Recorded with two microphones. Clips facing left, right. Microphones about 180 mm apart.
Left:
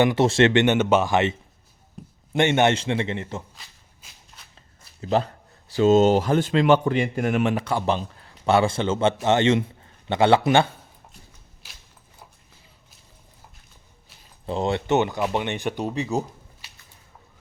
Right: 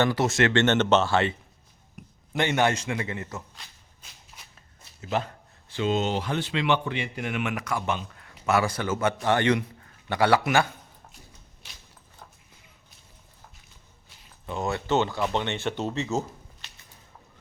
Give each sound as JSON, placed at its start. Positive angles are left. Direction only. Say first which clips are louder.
{"t": 0.0, "sound": "a man's voice", "louder": "left 5 dB", "side_deg": 20}
{"t": 4.5, "sound": "a man's voice", "louder": "left 1 dB", "side_deg": 35}
{"t": 14.4, "sound": "speech", "louder": "left 5 dB", "side_deg": 30}